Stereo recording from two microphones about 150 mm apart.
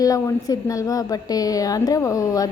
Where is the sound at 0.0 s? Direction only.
25° left (ahead or behind).